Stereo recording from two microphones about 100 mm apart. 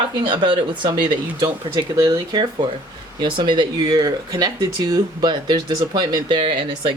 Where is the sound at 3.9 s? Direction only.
40° right (ahead or behind).